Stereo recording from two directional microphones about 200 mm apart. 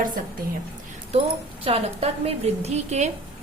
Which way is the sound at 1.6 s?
30° right (ahead or behind).